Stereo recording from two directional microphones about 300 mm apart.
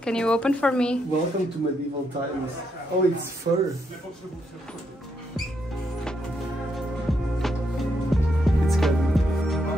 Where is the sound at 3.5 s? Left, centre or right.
Right.